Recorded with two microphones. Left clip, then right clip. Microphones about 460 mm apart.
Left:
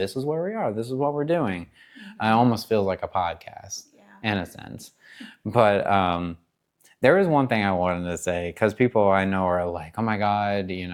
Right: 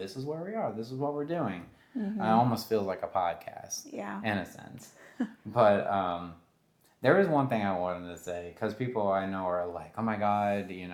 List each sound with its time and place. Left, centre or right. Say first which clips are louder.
0.0 s speech: left 11 dB; left
3.9 s speech: right 15 dB; right
4.2 s speech: left 8 dB; left
5.5 s speech: left 6 dB; left